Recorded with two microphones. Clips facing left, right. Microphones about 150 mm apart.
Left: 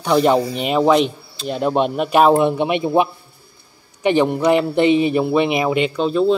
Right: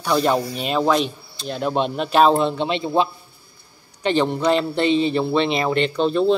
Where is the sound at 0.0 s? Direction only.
15° left (ahead or behind).